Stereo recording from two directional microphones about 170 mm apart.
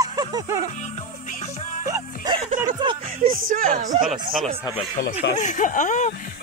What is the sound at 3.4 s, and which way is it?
Speech, 55° right (ahead or behind).